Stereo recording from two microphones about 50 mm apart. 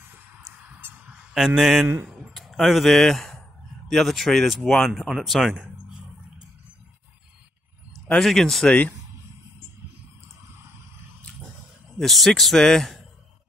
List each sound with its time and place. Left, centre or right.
0.7 s goose: right
1.3 s a man's voice: centre
8.2 s speech: centre
12.0 s speech: centre